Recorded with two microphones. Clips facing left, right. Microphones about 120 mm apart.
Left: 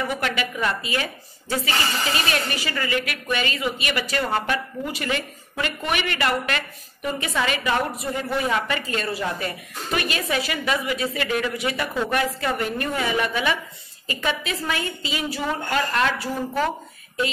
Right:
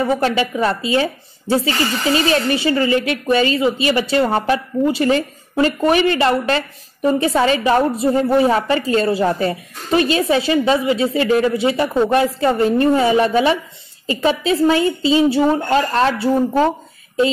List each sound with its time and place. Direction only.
0.0 s a woman's voice: 30° right (ahead or behind)